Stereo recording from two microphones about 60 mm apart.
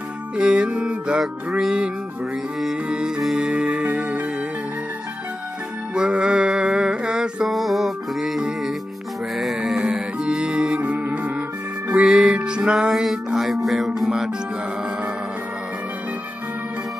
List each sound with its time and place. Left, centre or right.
0.4 s music: centre
1.2 s music: centre
2.9 s music: centre
5.9 s music: centre
7.4 s music: centre
9.8 s music: centre
10.8 s music: right
11.9 s music: centre
12.9 s music: centre